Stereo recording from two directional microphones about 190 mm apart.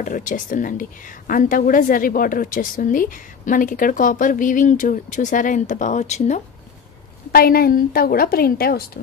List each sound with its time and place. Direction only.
0.0 s a woman's voice: 40° left (ahead or behind)
7.3 s a woman's voice: 50° left (ahead or behind)